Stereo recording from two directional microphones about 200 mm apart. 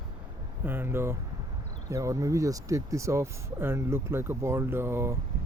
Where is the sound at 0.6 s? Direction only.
10° right (ahead or behind).